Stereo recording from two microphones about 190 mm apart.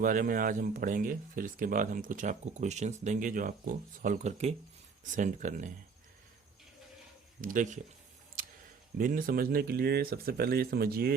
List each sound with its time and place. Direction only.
0.0 s speech: 45° right (ahead or behind)
7.4 s speech: 45° right (ahead or behind)
9.0 s speech: 45° right (ahead or behind)